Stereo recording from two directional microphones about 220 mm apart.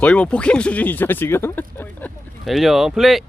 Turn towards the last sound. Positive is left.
turn(degrees=0)  # may be behind; listen again after turning